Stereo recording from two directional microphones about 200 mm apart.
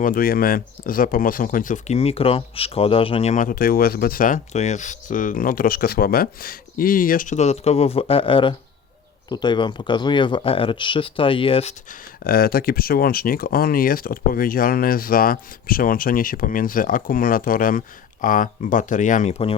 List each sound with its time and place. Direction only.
0.0 s speech: 45° left (ahead or behind); by 11.7 s 25° left (ahead or behind)
11.9 s speech: 45° left (ahead or behind); by 19.5 s 30° left (ahead or behind)